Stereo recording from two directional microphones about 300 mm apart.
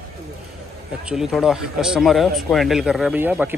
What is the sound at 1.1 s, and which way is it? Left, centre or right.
A man's voice, centre.